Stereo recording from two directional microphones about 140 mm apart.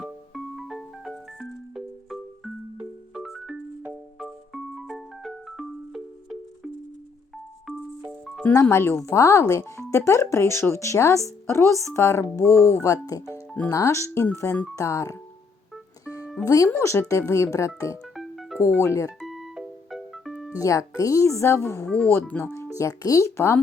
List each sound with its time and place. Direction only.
0.0 s music: centre (ahead or behind)
7.7 s music: centre (ahead or behind)
8.4 s speech: 15° left (ahead or behind)
16.0 s music: 25° left (ahead or behind)
16.5 s speech: 20° left (ahead or behind)
18.1 s music: centre (ahead or behind)
18.6 s speech: 20° left (ahead or behind)
19.2 s music: centre (ahead or behind)
20.5 s speech: 25° left (ahead or behind)